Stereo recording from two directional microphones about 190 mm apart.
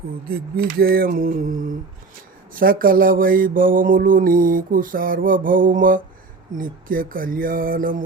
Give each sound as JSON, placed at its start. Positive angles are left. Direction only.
{"t": 0.3, "sound": "mantra", "side_deg": -55}